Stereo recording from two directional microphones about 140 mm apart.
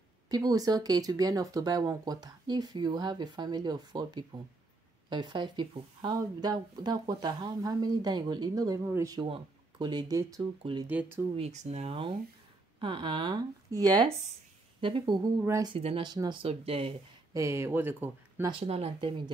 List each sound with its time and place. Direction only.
0.3 s speech: 30° right (ahead or behind)
9.2 s speech: 35° right (ahead or behind)
10.9 s speech: 15° right (ahead or behind)
11.3 s speech: 50° right (ahead or behind); by 14.0 s 25° right (ahead or behind)
14.8 s speech: 40° right (ahead or behind)
16.4 s speech: 45° right (ahead or behind)
17.3 s speech: 20° right (ahead or behind)
18.5 s speech: 45° right (ahead or behind)